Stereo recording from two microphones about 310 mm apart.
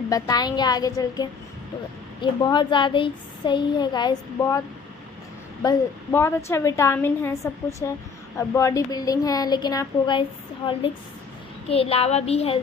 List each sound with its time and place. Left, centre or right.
0.1 s speech: centre
5.6 s speech: centre